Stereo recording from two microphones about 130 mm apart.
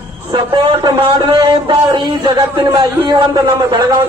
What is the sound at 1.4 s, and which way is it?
A man's voice, 35° right (ahead or behind).